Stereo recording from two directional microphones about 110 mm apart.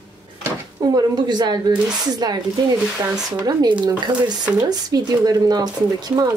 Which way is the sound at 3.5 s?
40° right (ahead or behind).